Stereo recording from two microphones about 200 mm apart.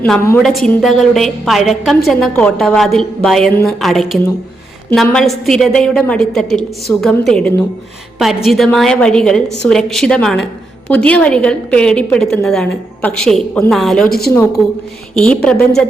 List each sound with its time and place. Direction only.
0.0 s a woman's voice: 5° left (ahead or behind)
14.1 s a woman's voice: 50° left (ahead or behind)
15.1 s a woman's voice: 5° left (ahead or behind)